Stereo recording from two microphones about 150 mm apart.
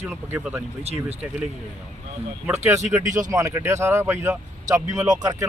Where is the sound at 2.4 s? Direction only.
15° right (ahead or behind).